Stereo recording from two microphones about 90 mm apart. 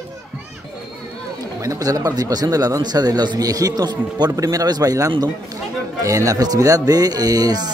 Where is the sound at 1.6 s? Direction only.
40° right (ahead or behind).